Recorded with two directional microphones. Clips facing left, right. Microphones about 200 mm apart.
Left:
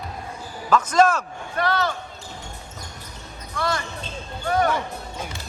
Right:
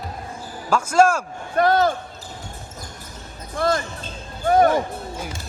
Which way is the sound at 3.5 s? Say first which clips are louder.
Right 5 dB; 50° right (ahead or behind).